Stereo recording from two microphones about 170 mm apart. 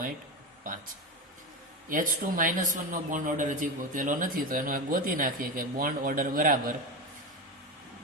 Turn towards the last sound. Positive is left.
turn(degrees=-55)  # may be behind; listen again after turning